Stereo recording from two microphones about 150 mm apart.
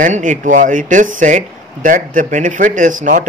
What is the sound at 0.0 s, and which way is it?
Speech, 60° right (ahead or behind).